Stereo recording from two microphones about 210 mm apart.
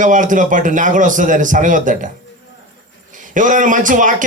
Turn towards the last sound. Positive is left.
turn(degrees=-40)  # may be behind; listen again after turning